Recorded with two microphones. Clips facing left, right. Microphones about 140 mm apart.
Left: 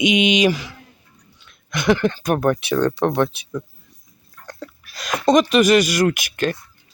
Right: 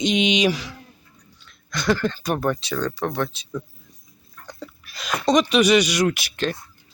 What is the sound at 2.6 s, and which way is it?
Speech, 65° left (ahead or behind).